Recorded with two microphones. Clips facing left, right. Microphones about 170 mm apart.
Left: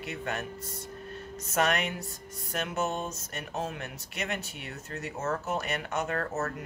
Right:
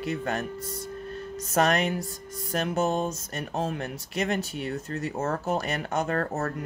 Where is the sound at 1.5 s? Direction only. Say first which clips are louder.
Right 4 dB; 35° right (ahead or behind).